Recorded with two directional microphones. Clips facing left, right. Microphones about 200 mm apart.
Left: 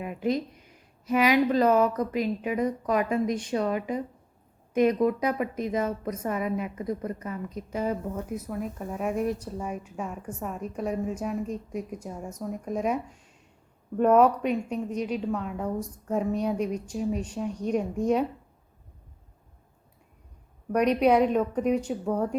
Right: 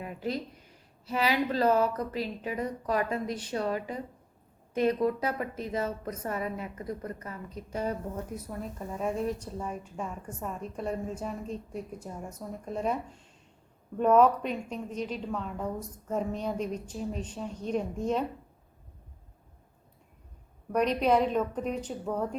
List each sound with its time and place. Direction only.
0.0 s a sound: 20° left (ahead or behind)
1.0 s a woman's voice: 15° left (ahead or behind)
20.7 s a woman's voice: 10° left (ahead or behind)